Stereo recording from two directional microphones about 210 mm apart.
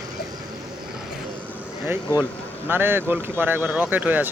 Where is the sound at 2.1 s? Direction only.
15° left (ahead or behind).